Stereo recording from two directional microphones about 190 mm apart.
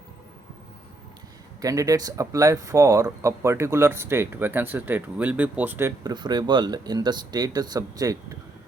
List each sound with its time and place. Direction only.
1.6 s speech: 15° right (ahead or behind)